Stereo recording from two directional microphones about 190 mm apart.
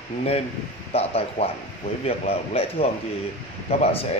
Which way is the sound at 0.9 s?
30° left (ahead or behind).